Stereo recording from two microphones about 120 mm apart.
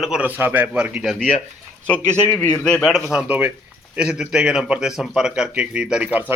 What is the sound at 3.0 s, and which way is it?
A man's voice, 10° right (ahead or behind).